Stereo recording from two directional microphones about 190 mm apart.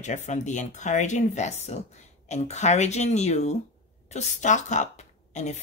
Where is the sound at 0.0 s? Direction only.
40° left (ahead or behind).